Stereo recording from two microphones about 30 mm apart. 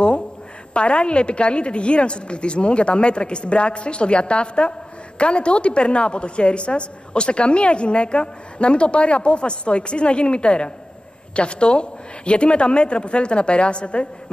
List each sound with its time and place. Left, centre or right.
0.7 s a woman's voice: left